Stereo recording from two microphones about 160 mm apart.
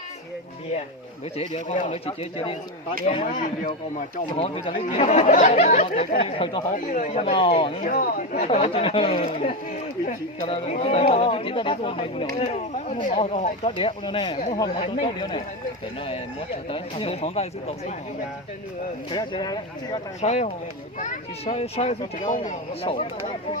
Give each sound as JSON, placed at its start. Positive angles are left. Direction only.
{"t": 1.4, "sound": "speech", "side_deg": 45}
{"t": 3.4, "sound": "speech", "side_deg": 55}
{"t": 4.4, "sound": "speech", "side_deg": 35}
{"t": 6.7, "sound": "speech", "side_deg": 50}
{"t": 7.8, "sound": "speech", "side_deg": 60}
{"t": 8.4, "sound": "speech", "side_deg": 40}
{"t": 13.7, "sound": "speech", "side_deg": 35}
{"t": 14.3, "sound": "speech", "side_deg": 50}
{"t": 14.6, "sound": "speech", "side_deg": 25}
{"t": 16.6, "sound": "speech", "side_deg": 35}
{"t": 19.1, "sound": "speech", "side_deg": 25}
{"t": 20.2, "sound": "speech", "side_deg": 45}
{"t": 22.3, "sound": "speech", "side_deg": 55}
{"t": 22.8, "sound": "speech", "side_deg": 35}